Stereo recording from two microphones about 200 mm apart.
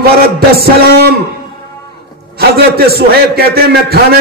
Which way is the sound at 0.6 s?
50° right (ahead or behind).